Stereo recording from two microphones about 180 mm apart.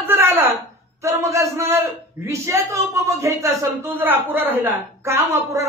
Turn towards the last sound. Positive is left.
turn(degrees=-15)  # may be behind; listen again after turning